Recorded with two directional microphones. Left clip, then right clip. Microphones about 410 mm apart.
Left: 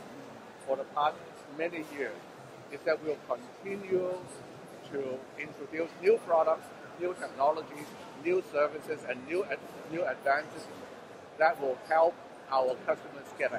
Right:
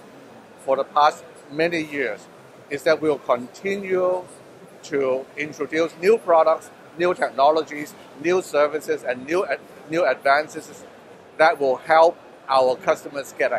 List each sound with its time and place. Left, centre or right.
0.7 s speech: right
5.0 s speech: right